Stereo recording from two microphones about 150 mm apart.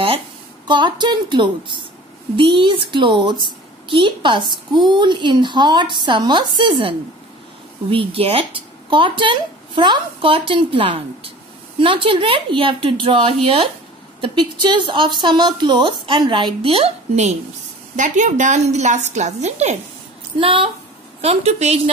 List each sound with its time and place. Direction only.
0.7 s a woman's voice: 30° right (ahead or behind)
17.9 s a woman's voice: 55° right (ahead or behind)
20.3 s a woman's voice: 35° right (ahead or behind)